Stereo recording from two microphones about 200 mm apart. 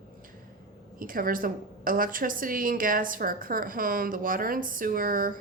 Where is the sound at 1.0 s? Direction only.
45° right (ahead or behind).